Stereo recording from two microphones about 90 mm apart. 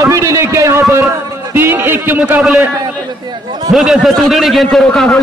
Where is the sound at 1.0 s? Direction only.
20° right (ahead or behind).